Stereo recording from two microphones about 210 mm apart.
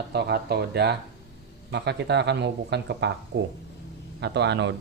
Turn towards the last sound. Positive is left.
turn(degrees=-55)  # may be behind; listen again after turning